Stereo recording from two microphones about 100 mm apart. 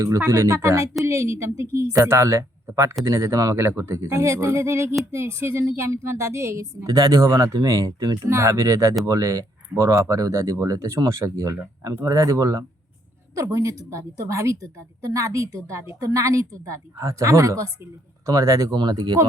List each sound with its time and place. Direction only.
0.0 s a woman's voice: 30° right (ahead or behind)
18.7 s speech: 45° right (ahead or behind)